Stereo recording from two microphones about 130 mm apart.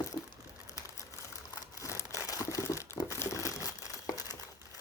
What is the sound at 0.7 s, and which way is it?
Crumpling, 25° left (ahead or behind).